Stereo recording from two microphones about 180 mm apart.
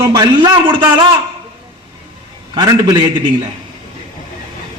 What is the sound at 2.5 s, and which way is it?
Speech, 20° right (ahead or behind).